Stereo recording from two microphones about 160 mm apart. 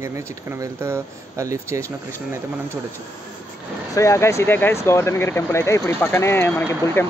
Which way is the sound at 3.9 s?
20° left (ahead or behind).